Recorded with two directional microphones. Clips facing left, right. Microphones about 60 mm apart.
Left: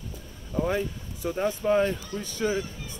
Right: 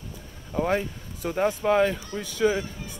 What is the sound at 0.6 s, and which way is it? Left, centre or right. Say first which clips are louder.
Speech: right 2 dB; right.